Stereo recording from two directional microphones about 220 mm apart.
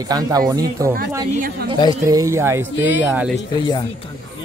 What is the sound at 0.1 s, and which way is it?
Speech, 20° right (ahead or behind).